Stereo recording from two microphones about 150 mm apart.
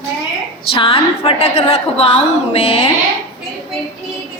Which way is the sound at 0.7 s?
40° left (ahead or behind).